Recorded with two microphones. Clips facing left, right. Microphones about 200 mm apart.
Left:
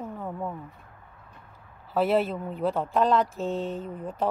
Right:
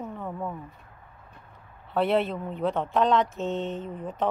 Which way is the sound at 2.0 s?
Centre (ahead or behind).